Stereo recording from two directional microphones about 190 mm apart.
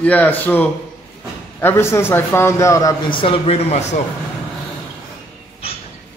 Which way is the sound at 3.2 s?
30° left (ahead or behind).